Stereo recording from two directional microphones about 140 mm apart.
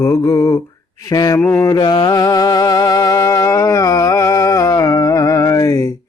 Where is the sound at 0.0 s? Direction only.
20° left (ahead or behind).